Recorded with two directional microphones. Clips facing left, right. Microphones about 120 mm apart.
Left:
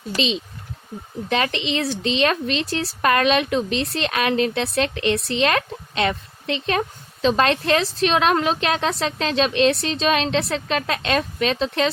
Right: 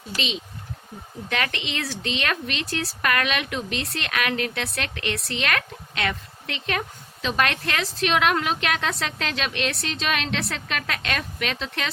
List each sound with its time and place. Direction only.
1.3 s speech: 25° left (ahead or behind)